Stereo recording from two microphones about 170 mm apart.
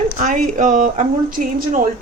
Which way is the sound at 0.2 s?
50° right (ahead or behind).